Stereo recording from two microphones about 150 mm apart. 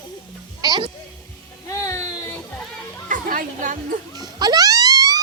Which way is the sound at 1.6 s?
20° left (ahead or behind).